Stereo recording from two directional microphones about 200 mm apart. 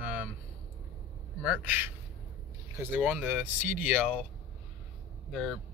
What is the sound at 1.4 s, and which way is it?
Speech, 5° right (ahead or behind).